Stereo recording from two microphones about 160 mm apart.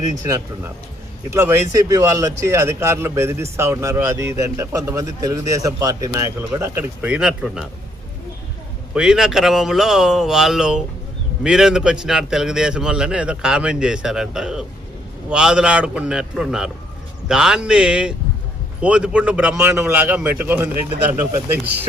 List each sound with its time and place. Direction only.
1.3 s speech: 15° right (ahead or behind)
9.0 s a man's voice: 5° right (ahead or behind)